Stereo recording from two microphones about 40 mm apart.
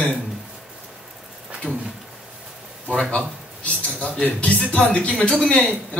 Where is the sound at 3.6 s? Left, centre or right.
Left.